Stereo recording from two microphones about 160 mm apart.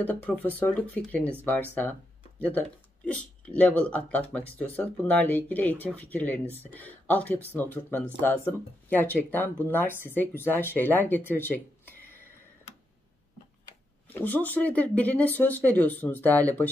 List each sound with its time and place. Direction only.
0.0 s speech: 10° left (ahead or behind)
14.0 s speech: 10° left (ahead or behind)